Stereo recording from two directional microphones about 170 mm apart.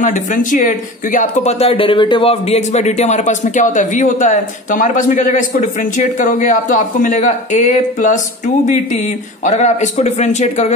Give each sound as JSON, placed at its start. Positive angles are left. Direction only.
{"t": 0.0, "sound": "speech", "side_deg": 50}